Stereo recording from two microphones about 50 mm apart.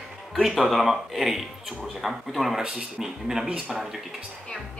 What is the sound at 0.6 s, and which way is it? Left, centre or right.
Speech, centre.